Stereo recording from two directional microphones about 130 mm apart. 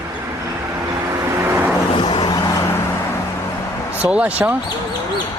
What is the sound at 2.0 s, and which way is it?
Vehicle, 35° left (ahead or behind).